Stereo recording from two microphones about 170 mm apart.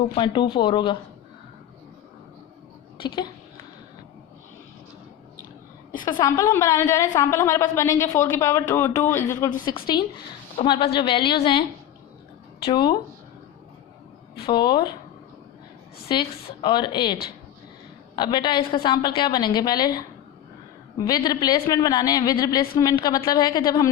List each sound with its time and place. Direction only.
0.1 s a woman's voice: 30° left (ahead or behind)
6.1 s a woman's voice: 20° left (ahead or behind)
12.6 s a woman's voice: 25° left (ahead or behind)
14.5 s a woman's voice: 25° left (ahead or behind)
16.0 s a woman's voice: 30° left (ahead or behind)
18.2 s a woman's voice: 25° left (ahead or behind)
21.1 s a woman's voice: 20° left (ahead or behind)